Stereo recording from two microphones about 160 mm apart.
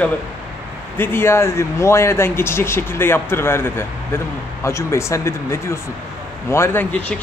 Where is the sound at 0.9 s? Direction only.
15° left (ahead or behind).